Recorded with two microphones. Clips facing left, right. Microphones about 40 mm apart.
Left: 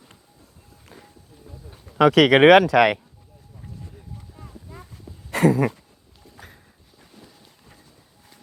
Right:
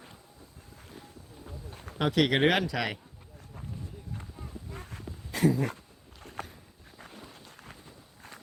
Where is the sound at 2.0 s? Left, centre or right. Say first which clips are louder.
Left 11 dB; left.